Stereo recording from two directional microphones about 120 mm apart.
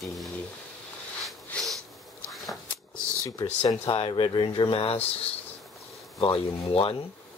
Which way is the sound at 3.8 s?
50° left (ahead or behind).